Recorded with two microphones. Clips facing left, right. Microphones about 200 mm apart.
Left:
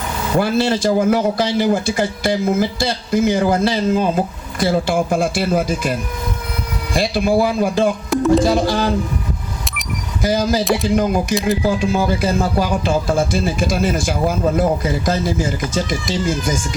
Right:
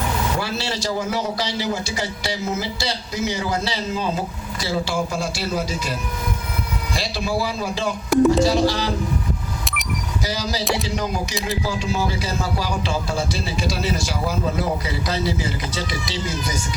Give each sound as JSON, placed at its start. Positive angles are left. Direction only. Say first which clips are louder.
{"t": 0.3, "sound": "speech", "louder": "left 9 dB", "side_deg": 50}
{"t": 10.2, "sound": "speech", "louder": "left 9 dB", "side_deg": 50}